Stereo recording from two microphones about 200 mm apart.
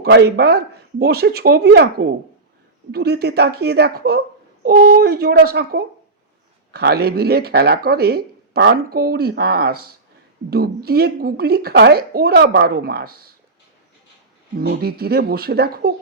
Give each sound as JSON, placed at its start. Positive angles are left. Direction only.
{"t": 0.0, "sound": "speech", "side_deg": -55}
{"t": 14.6, "sound": "speech", "side_deg": -50}